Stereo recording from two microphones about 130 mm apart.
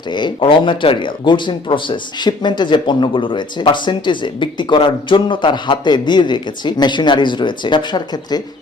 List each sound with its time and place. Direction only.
0.1 s speech: 35° left (ahead or behind)